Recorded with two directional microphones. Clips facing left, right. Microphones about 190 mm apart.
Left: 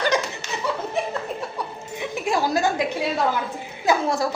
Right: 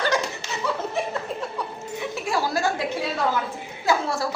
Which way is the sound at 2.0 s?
20° left (ahead or behind).